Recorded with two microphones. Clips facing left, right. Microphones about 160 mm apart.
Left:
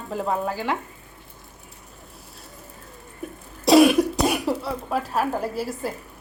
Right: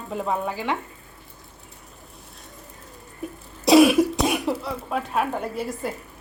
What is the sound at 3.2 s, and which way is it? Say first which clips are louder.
Cough: even; centre (ahead or behind).